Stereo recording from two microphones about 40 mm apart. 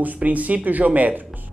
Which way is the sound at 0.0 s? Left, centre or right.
Right.